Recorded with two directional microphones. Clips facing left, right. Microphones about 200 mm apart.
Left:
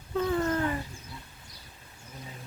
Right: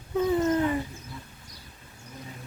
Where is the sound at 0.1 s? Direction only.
15° right (ahead or behind).